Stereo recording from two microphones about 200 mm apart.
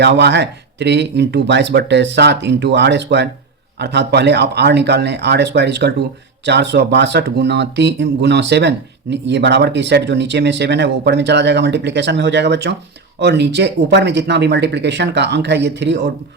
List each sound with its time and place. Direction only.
0.0 s speech: 60° right (ahead or behind)